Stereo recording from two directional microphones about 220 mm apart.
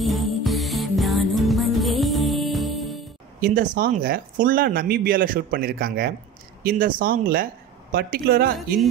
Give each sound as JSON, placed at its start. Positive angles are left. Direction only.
{"t": 0.0, "sound": "music", "side_deg": 0}
{"t": 3.3, "sound": "speech", "side_deg": -40}